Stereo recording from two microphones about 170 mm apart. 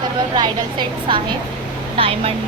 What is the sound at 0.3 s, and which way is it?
A woman's voice, 25° right (ahead or behind).